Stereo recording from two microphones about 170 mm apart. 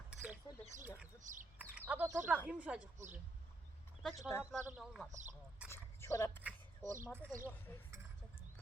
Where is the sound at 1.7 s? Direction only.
10° right (ahead or behind).